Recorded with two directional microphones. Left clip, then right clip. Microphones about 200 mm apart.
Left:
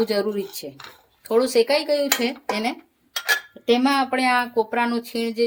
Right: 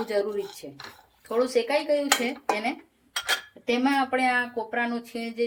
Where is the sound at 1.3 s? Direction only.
60° left (ahead or behind).